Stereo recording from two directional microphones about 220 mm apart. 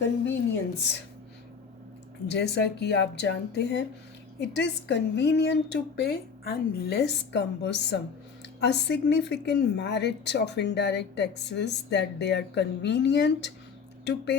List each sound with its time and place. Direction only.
2.2 s a woman's voice: 50° left (ahead or behind)